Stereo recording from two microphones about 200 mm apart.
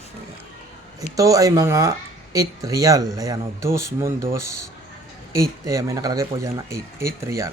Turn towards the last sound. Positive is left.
turn(degrees=-15)  # may be behind; listen again after turning